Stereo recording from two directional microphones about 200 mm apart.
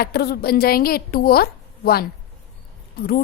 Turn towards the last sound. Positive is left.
turn(degrees=50)  # may be behind; listen again after turning